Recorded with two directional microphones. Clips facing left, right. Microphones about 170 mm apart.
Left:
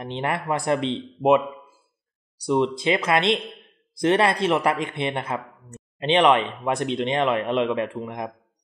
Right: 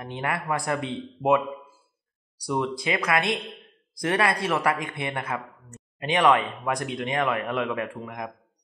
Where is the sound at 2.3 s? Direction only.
25° left (ahead or behind).